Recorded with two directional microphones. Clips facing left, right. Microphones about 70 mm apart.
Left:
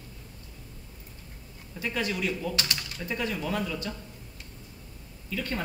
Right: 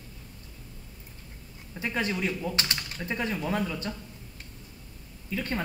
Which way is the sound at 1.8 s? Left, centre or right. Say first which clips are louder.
Right 1 dB; right.